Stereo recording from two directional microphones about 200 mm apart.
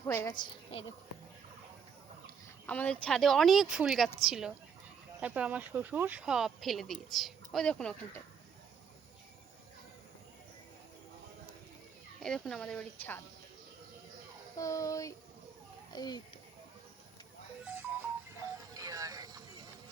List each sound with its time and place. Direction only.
0.0 s a woman's voice: 15° left (ahead or behind)
2.6 s speech: 5° left (ahead or behind)
12.2 s speech: centre (ahead or behind)
14.6 s child singing: 15° left (ahead or behind)
15.9 s a child's voice: 20° left (ahead or behind)
18.7 s a sound: 15° right (ahead or behind)